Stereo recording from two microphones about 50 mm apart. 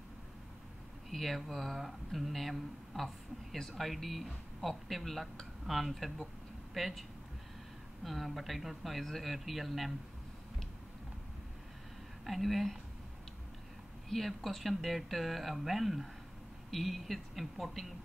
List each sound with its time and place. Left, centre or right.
1.1 s speech: centre
12.3 s speech: centre
14.0 s speech: centre